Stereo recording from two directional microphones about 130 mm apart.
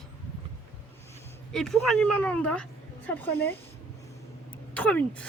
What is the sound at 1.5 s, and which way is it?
Speech, 5° left (ahead or behind).